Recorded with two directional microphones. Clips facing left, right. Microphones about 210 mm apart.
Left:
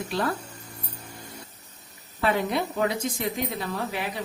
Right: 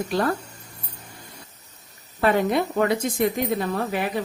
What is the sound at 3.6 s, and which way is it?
Speech, 50° right (ahead or behind).